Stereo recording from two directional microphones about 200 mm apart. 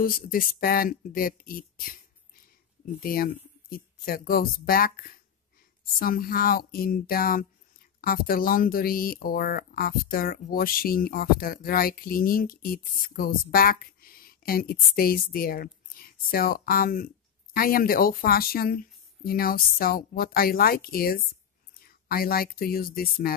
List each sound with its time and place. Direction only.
0.0 s speech: 45° left (ahead or behind)
3.0 s speech: 45° left (ahead or behind)